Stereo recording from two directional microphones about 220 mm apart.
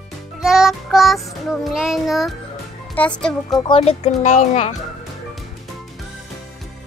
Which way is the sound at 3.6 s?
25° left (ahead or behind).